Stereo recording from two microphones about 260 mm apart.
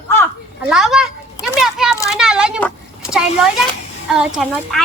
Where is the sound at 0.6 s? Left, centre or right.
Centre.